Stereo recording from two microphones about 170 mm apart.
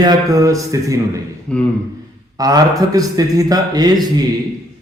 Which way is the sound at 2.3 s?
20° right (ahead or behind).